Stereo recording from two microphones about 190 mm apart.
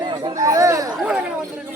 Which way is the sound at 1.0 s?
5° right (ahead or behind).